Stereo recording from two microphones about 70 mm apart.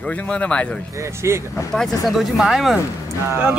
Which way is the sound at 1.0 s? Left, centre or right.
Right.